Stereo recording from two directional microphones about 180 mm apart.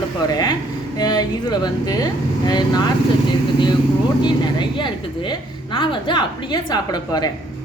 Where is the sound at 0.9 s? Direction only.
20° left (ahead or behind).